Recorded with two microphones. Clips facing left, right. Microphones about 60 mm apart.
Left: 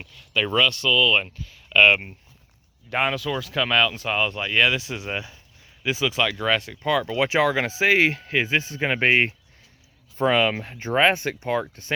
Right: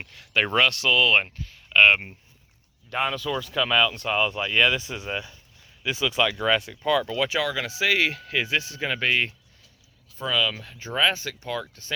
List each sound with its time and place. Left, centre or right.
0.1 s speech: right
1.7 s speech: right
2.9 s speech: centre
7.2 s speech: left
7.4 s speech: left